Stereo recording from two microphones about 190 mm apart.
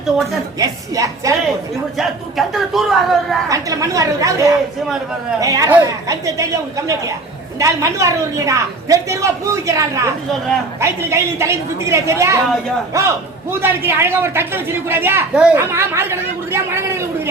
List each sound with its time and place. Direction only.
0.6 s a man's voice: 15° right (ahead or behind)
2.0 s speech: centre (ahead or behind)
3.5 s a man's voice: 15° right (ahead or behind)